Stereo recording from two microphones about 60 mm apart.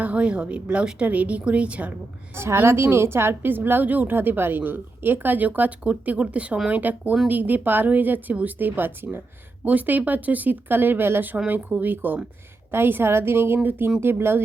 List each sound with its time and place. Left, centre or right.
0.0 s a woman's voice: centre
2.3 s a woman's voice: right